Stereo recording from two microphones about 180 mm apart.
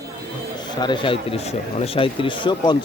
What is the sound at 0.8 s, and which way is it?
Speech, 25° left (ahead or behind).